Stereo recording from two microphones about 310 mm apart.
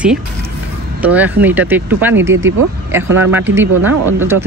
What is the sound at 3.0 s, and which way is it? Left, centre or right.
Speech, right.